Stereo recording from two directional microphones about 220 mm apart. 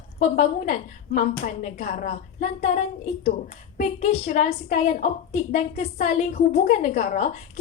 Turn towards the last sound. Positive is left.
turn(degrees=35)  # may be behind; listen again after turning